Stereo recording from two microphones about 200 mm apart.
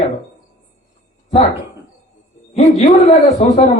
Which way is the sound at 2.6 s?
35° left (ahead or behind).